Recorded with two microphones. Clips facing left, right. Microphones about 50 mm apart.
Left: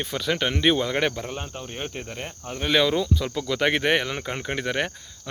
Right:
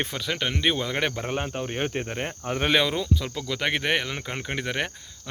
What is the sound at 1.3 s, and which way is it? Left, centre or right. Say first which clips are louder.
Speech: right 5 dB; right.